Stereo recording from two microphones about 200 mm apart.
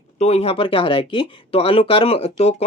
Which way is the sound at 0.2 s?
30° left (ahead or behind).